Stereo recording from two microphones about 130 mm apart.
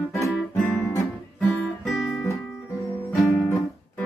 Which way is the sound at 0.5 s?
10° left (ahead or behind).